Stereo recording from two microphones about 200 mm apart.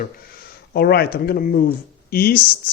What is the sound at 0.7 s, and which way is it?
Speech, 50° left (ahead or behind).